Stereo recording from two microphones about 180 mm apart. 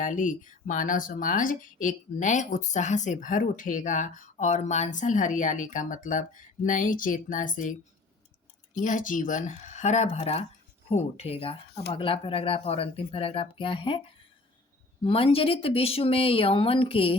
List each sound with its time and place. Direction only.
0.0 s speech: 45° left (ahead or behind); by 14.0 s 30° left (ahead or behind)
15.0 s speech: 30° left (ahead or behind)